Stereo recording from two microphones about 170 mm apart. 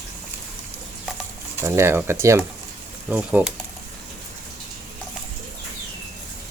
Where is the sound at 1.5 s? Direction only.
15° right (ahead or behind).